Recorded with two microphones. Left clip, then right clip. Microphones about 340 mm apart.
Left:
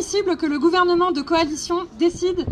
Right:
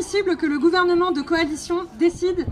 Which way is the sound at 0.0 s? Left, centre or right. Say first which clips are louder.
Even; centre.